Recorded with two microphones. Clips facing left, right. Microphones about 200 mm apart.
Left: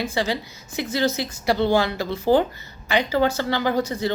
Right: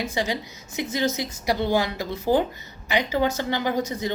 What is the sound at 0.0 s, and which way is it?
A woman's voice, 15° right (ahead or behind).